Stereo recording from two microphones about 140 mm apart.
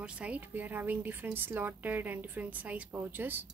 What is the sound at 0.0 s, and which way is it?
A woman's voice, 10° right (ahead or behind).